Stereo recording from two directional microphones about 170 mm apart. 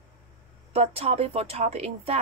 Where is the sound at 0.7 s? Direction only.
35° right (ahead or behind).